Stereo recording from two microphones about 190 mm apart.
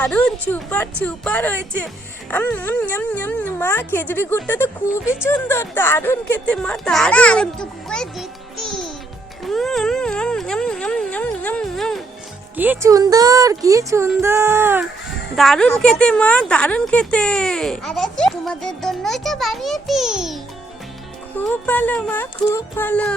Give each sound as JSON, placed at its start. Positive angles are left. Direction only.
{"t": 0.0, "sound": "speech", "side_deg": 5}
{"t": 9.4, "sound": "a sound", "side_deg": 0}
{"t": 12.5, "sound": "speech", "side_deg": -10}
{"t": 15.4, "sound": "a woman's voice", "side_deg": 5}
{"t": 21.3, "sound": "speech", "side_deg": 10}